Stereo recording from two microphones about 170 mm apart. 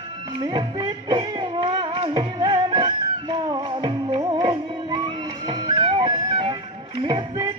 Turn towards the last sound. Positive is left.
turn(degrees=-25)  # may be behind; listen again after turning